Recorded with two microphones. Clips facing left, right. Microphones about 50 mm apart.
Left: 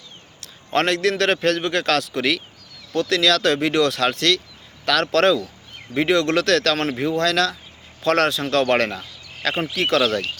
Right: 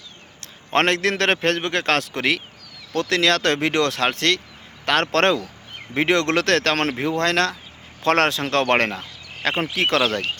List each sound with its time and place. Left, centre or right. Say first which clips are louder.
0.7 s a man's voice: even; right
6.0 s a man's voice: left 1 dB; right